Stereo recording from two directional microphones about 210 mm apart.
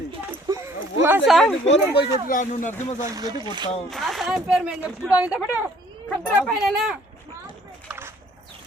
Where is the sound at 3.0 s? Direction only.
15° right (ahead or behind).